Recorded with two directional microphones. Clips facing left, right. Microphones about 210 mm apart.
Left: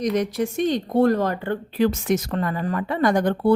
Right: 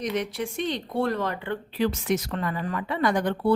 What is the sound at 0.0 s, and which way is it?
Speech, 40° left (ahead or behind).